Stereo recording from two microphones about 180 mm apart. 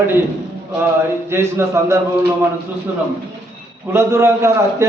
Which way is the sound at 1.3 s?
15° right (ahead or behind).